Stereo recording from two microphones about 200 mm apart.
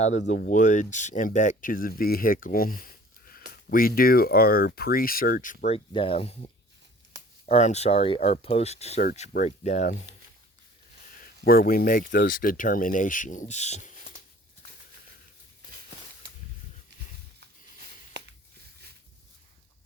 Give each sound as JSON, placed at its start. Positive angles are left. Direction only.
{"t": 0.3, "sound": "speech", "side_deg": 40}
{"t": 7.4, "sound": "speech", "side_deg": 35}
{"t": 11.4, "sound": "speech", "side_deg": 45}
{"t": 18.2, "sound": "a sound", "side_deg": -60}